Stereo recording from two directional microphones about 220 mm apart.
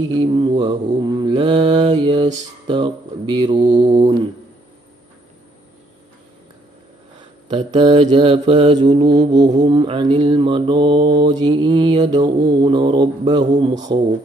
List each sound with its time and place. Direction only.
0.2 s mantra: 20° right (ahead or behind)
7.4 s mantra: 20° right (ahead or behind)